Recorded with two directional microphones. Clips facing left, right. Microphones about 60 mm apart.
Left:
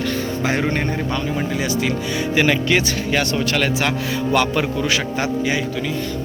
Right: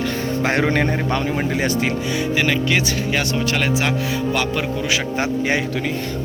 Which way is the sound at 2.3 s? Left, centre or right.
Centre.